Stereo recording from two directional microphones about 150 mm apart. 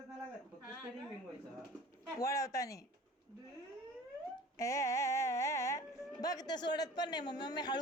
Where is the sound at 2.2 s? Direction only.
20° left (ahead or behind).